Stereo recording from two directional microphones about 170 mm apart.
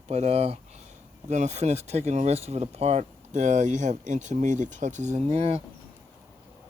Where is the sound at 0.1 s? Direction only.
40° right (ahead or behind).